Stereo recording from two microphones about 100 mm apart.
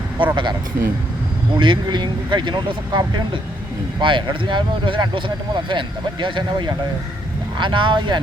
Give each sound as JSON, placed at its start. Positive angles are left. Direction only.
{"t": 0.2, "sound": "speech", "side_deg": -55}
{"t": 1.5, "sound": "speech", "side_deg": -55}